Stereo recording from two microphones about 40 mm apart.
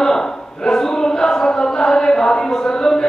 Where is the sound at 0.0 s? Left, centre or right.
Centre.